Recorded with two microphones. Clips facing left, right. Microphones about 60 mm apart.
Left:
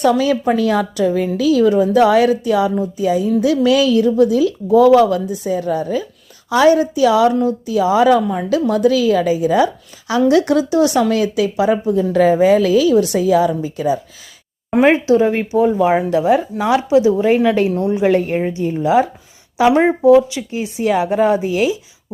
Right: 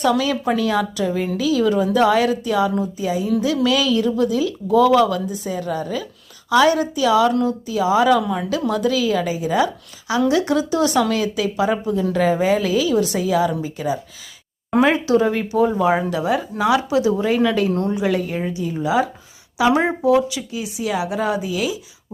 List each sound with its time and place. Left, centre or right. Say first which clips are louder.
0.2 s speech: left 4 dB; left
17.7 s a woman's voice: left 3 dB; centre
17.9 s speech: left 6 dB; left
20.6 s speech: left 7 dB; left
21.2 s speech: left 8 dB; left